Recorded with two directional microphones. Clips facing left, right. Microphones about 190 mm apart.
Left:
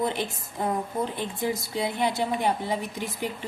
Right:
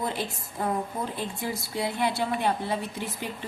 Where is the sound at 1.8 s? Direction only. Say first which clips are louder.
Even; 20° left (ahead or behind).